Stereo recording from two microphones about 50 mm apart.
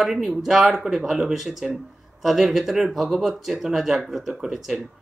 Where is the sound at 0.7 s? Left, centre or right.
Centre.